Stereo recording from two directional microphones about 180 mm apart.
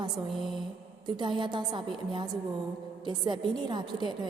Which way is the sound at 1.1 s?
25° right (ahead or behind).